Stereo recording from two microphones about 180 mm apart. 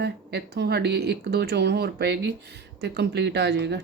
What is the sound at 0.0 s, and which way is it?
Speech, 65° right (ahead or behind).